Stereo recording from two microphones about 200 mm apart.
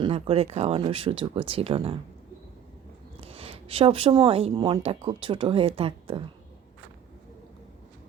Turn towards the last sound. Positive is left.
turn(degrees=-25)  # may be behind; listen again after turning